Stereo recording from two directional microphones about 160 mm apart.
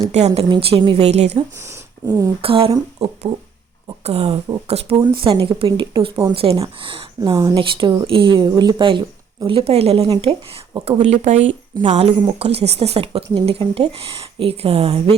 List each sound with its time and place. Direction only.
0.1 s a woman's voice: 45° right (ahead or behind)
0.5 s speech: 35° right (ahead or behind)
1.5 s a sound: 15° right (ahead or behind)
2.4 s speech: 35° right (ahead or behind)
4.0 s speech: 40° right (ahead or behind)
4.9 s speech: 30° right (ahead or behind)
7.2 s a woman's voice: 20° right (ahead or behind); by 15.1 s 40° right (ahead or behind)